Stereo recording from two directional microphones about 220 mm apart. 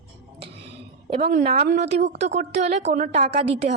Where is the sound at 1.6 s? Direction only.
45° right (ahead or behind).